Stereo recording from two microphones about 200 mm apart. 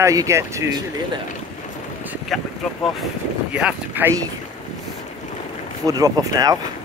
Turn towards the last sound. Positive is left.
turn(degrees=-20)  # may be behind; listen again after turning